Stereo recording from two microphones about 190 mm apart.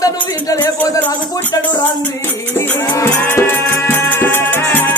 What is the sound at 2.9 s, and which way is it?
Music, 15° left (ahead or behind).